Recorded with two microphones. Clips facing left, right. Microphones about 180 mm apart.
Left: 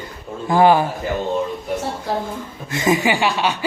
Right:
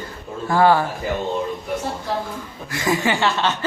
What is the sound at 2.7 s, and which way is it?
Speech, 20° left (ahead or behind).